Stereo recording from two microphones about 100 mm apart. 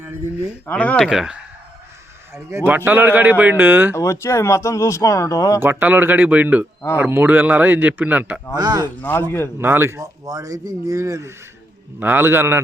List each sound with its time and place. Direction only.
0.6 s speech: 15° left (ahead or behind)
1.0 s speech: 5° right (ahead or behind)
2.3 s speech: 25° right (ahead or behind)
3.9 s speech: 30° left (ahead or behind)
5.5 s speech: 20° right (ahead or behind)
8.5 s speech: 40° right (ahead or behind)
9.0 s speech: 20° left (ahead or behind)
9.6 s speech: 20° right (ahead or behind)
10.2 s speech: 35° right (ahead or behind)